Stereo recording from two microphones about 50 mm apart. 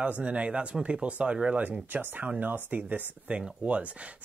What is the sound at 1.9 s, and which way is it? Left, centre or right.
Speech, right.